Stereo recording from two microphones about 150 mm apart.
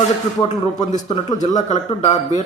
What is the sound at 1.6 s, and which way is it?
Speech, 45° left (ahead or behind).